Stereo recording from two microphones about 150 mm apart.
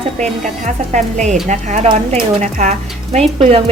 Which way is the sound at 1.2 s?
50° right (ahead or behind).